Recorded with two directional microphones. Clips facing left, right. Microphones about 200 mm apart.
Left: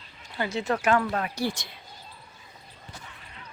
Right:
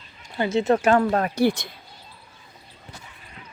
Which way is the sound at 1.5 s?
55° right (ahead or behind).